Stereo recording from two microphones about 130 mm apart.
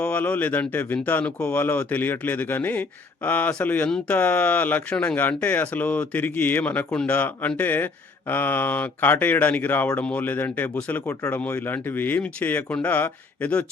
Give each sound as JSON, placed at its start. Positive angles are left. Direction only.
{"t": 0.0, "sound": "speech", "side_deg": 10}